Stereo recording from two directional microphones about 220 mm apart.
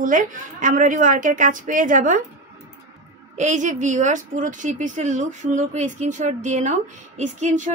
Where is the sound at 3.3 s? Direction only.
35° right (ahead or behind).